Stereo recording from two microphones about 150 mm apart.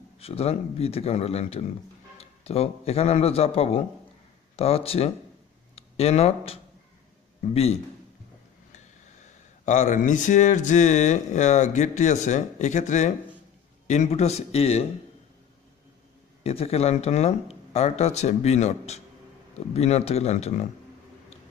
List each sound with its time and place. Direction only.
0.2 s a man's voice: 40° left (ahead or behind)
8.7 s speech: 50° left (ahead or behind)
16.4 s speech: 45° left (ahead or behind)